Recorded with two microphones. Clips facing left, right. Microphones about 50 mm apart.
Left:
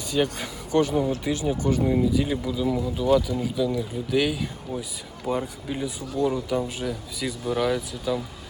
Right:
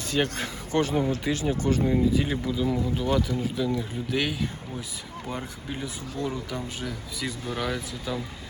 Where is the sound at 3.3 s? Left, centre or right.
Right.